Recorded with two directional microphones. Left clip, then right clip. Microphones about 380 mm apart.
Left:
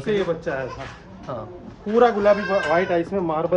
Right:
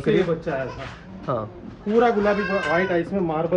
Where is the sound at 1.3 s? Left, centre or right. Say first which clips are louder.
Right 6 dB; centre.